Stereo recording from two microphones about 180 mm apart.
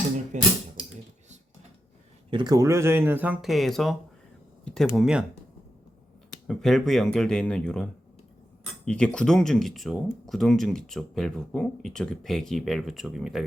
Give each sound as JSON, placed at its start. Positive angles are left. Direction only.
{"t": 0.3, "sound": "speech", "side_deg": -40}
{"t": 2.3, "sound": "speech", "side_deg": -20}
{"t": 6.5, "sound": "speech", "side_deg": 0}
{"t": 8.9, "sound": "speech", "side_deg": 5}